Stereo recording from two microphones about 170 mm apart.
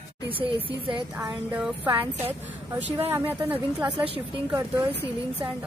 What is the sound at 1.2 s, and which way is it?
Speech, 10° right (ahead or behind).